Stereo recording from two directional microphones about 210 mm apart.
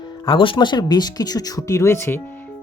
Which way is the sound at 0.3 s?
25° left (ahead or behind).